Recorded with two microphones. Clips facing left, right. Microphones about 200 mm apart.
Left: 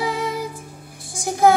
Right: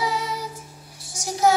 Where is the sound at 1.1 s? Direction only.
55° left (ahead or behind).